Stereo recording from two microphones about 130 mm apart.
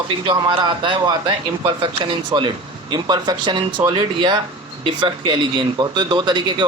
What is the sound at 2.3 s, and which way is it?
Speech, 35° right (ahead or behind).